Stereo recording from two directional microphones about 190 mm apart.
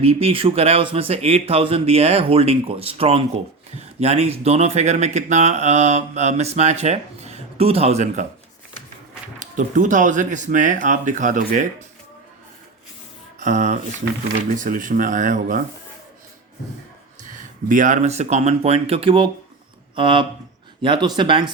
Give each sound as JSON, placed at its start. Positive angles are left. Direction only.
{"t": 0.0, "sound": "speech", "side_deg": -30}
{"t": 9.4, "sound": "speech", "side_deg": -45}
{"t": 13.4, "sound": "speech", "side_deg": -40}
{"t": 17.7, "sound": "speech", "side_deg": -45}